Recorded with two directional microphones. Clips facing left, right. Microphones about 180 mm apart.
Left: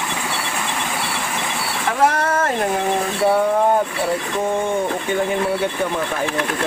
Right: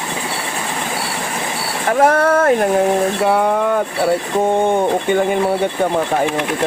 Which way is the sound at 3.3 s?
90° right.